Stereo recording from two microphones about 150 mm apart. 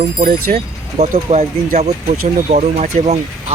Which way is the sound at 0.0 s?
55° right (ahead or behind).